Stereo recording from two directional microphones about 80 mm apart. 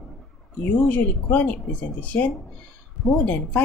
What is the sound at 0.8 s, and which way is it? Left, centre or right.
A woman's voice, left.